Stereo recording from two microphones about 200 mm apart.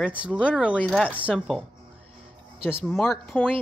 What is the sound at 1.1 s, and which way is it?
Speech, 5° right (ahead or behind).